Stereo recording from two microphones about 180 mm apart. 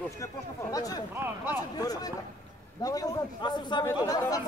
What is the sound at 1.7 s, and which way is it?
A man's voice, 20° left (ahead or behind).